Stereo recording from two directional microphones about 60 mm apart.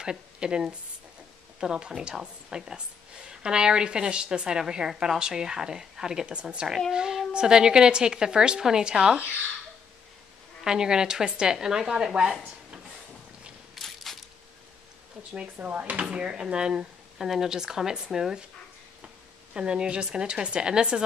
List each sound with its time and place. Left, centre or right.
0.0 s a woman's voice: centre
10.6 s a woman's voice: centre
13.7 s a sound: centre
15.5 s a woman's voice: right
19.5 s a woman's voice: centre